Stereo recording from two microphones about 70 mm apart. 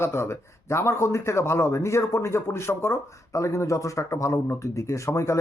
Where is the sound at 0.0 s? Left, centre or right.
Left.